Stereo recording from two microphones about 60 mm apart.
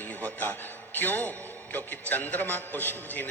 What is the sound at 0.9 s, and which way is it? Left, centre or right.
A man's voice, left.